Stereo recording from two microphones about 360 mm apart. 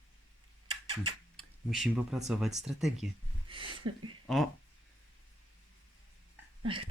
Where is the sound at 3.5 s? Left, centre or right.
Centre.